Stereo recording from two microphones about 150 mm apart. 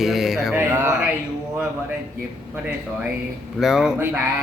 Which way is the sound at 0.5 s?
15° right (ahead or behind).